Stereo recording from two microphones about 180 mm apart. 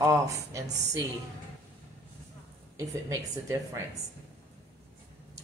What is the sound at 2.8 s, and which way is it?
A woman's voice, 15° right (ahead or behind).